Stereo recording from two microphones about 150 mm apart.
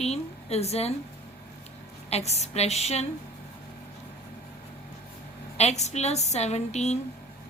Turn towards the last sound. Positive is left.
turn(degrees=50)  # may be behind; listen again after turning